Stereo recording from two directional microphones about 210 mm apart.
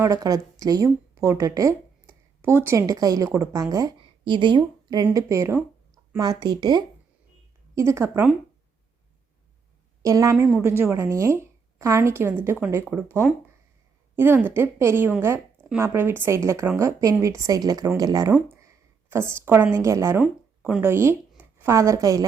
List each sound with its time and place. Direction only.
0.0 s a woman's voice: 15° right (ahead or behind)
10.0 s a woman's voice: 15° right (ahead or behind)